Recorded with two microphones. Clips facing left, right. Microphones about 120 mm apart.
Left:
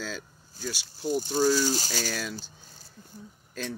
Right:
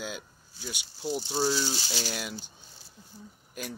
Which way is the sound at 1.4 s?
45° left (ahead or behind).